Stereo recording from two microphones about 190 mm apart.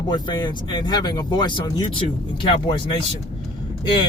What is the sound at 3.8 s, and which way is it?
Speech, 25° left (ahead or behind).